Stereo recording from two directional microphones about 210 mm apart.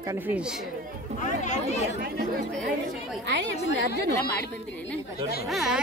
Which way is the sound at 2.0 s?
50° right (ahead or behind).